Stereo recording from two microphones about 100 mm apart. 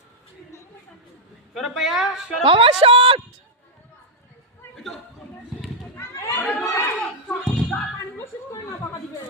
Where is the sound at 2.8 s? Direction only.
65° right (ahead or behind).